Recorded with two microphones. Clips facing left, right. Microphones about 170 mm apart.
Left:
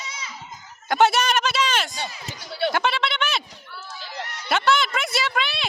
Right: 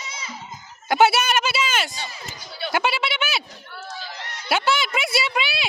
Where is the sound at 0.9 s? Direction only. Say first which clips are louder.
Right 1 dB; 5° right (ahead or behind).